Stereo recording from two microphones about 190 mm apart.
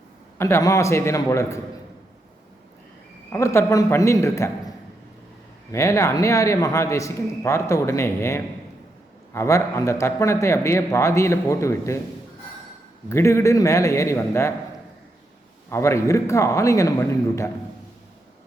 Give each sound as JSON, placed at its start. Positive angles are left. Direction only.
{"t": 0.3, "sound": "a man's voice", "side_deg": 15}
{"t": 3.3, "sound": "a man's voice", "side_deg": 15}
{"t": 5.7, "sound": "a man's voice", "side_deg": 15}
{"t": 13.1, "sound": "a man's voice", "side_deg": 15}
{"t": 15.7, "sound": "a man's voice", "side_deg": 15}